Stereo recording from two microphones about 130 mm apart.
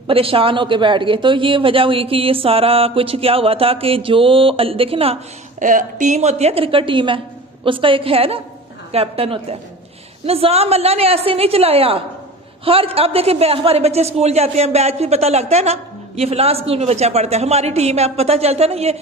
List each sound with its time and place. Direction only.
0.1 s a woman's voice: 45° right (ahead or behind)
5.5 s a woman's voice: 80° right; by 18.9 s 55° right (ahead or behind)